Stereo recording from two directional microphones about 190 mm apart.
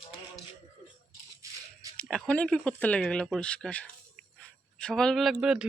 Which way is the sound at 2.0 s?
5° left (ahead or behind).